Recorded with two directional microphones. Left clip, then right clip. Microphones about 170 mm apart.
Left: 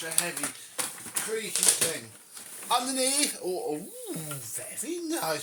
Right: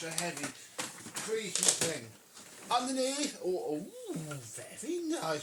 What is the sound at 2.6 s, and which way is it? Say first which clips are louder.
Speech: left 4 dB; 20° left (ahead or behind).